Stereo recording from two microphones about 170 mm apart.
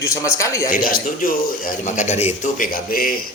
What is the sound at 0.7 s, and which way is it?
A man's voice, 55° left (ahead or behind).